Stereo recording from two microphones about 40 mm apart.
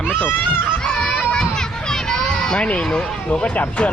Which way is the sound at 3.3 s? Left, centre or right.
Left.